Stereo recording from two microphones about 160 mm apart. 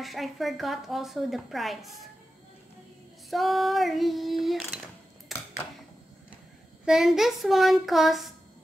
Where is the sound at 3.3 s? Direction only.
Centre (ahead or behind).